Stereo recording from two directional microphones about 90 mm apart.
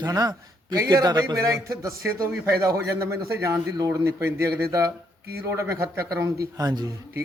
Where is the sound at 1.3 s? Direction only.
35° right (ahead or behind).